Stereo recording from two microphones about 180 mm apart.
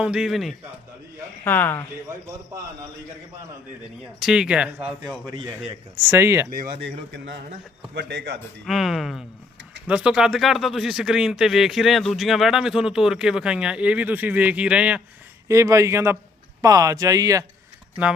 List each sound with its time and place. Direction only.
0.0 s speech: 5° right (ahead or behind)
1.5 s speech: 10° left (ahead or behind)
4.2 s speech: 5° right (ahead or behind)
6.0 s a man's voice: 15° right (ahead or behind)
6.5 s a man's voice: 55° right (ahead or behind)
8.6 s a man's voice: centre (ahead or behind); by 17.4 s 20° right (ahead or behind)